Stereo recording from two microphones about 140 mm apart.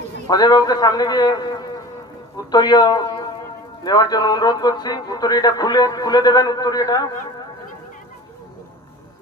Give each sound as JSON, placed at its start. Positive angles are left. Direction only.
{"t": 0.3, "sound": "a man's voice", "side_deg": 30}